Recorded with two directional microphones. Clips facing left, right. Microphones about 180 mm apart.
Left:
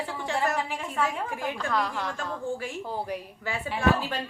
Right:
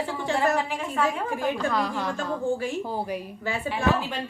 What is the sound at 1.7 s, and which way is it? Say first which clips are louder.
Speech: right 2 dB; 5° right (ahead or behind).